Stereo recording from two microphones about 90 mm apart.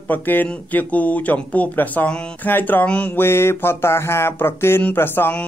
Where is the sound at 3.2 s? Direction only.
30° left (ahead or behind).